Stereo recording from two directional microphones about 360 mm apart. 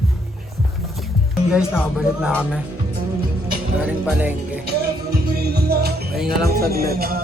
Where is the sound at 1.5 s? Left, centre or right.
Centre.